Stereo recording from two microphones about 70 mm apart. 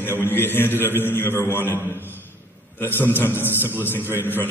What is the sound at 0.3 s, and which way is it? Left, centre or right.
A man's voice, left.